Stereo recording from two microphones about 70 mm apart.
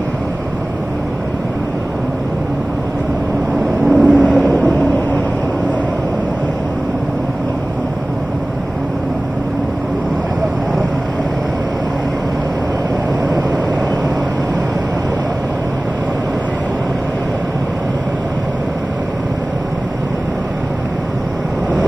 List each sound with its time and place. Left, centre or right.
3.8 s vehicle: centre